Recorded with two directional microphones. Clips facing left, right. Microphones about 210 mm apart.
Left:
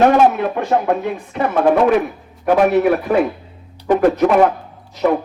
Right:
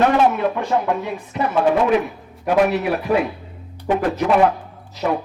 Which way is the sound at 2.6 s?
50° left (ahead or behind).